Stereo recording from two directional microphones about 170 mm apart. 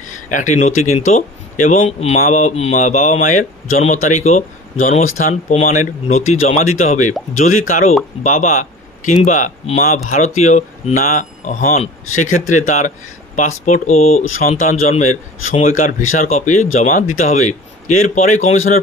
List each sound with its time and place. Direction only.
0.3 s a man's voice: 45° left (ahead or behind)